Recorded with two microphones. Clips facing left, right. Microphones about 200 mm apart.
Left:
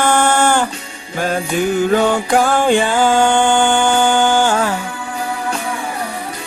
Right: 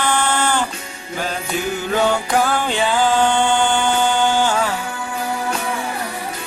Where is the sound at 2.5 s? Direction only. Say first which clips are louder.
Left 5 dB; 50° left (ahead or behind).